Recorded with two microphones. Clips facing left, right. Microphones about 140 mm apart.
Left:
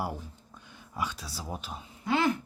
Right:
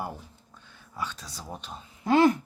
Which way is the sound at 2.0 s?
45° right (ahead or behind).